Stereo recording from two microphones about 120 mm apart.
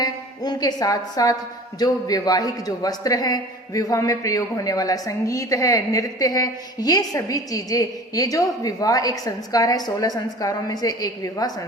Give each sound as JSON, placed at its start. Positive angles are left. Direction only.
{"t": 0.0, "sound": "music", "side_deg": 35}
{"t": 1.8, "sound": "a man's voice", "side_deg": 30}